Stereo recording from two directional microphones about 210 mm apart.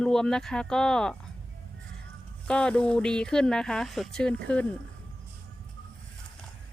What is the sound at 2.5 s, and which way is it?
Speech, 5° left (ahead or behind).